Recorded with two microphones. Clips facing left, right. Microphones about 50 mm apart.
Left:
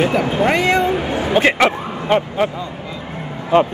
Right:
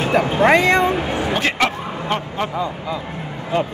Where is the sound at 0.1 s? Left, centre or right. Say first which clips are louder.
Right 2 dB; right.